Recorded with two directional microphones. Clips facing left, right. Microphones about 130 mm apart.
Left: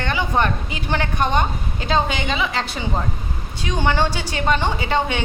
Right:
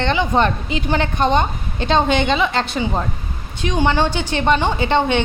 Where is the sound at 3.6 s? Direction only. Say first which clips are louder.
Right 3 dB; 15° right (ahead or behind).